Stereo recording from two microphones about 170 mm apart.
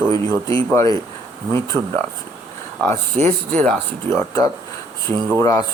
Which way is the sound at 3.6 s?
10° left (ahead or behind).